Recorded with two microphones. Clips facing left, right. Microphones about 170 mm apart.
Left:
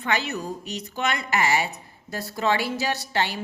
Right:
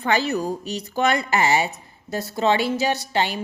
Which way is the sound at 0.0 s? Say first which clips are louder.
Right 5 dB; 35° right (ahead or behind).